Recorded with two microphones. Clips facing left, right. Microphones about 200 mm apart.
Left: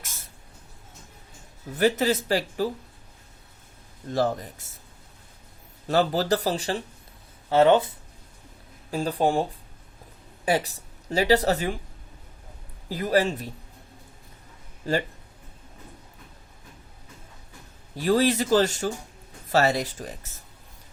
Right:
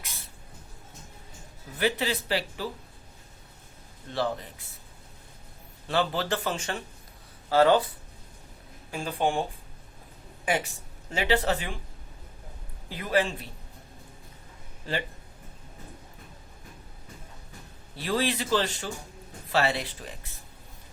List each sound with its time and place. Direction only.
0.0 s a sound: 45° left (ahead or behind)
1.8 s a man's voice: 45° left (ahead or behind)
4.1 s a man's voice: 45° left (ahead or behind)
5.9 s speech: 40° left (ahead or behind)
7.5 s speech: 25° left (ahead or behind)
8.9 s speech: 35° left (ahead or behind)
10.4 s speech: 35° left (ahead or behind)
12.9 s a man's voice: 40° left (ahead or behind)
14.8 s a man's voice: 45° left (ahead or behind)
17.9 s a man's voice: 45° left (ahead or behind)